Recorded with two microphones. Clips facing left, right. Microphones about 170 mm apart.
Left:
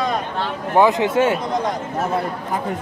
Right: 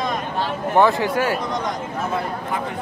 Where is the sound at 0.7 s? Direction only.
20° left (ahead or behind).